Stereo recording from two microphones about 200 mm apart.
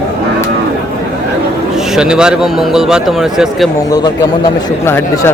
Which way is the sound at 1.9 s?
5° right (ahead or behind).